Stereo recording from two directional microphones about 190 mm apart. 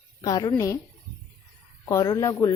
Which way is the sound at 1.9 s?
15° left (ahead or behind).